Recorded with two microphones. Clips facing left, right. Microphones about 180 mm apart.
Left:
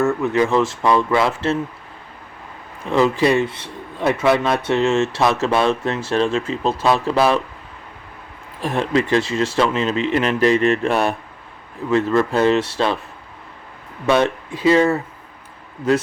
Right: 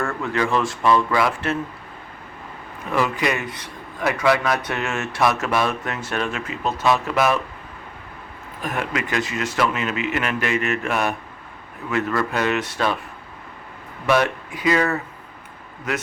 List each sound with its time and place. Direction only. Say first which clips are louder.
0.0 s speech: left 6 dB; 20° left (ahead or behind)
2.9 s speech: left 6 dB; 30° left (ahead or behind)
8.6 s speech: left 7 dB; 30° left (ahead or behind)
14.1 s speech: left 3 dB; 25° left (ahead or behind)